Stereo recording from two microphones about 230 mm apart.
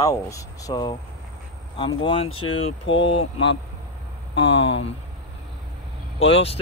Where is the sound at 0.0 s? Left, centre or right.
Centre.